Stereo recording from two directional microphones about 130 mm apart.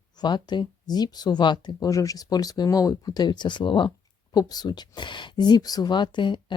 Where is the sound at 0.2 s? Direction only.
35° left (ahead or behind).